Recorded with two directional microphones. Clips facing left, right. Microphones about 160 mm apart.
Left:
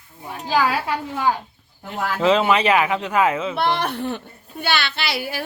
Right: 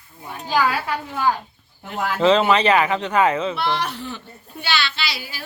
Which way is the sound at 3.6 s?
50° left (ahead or behind).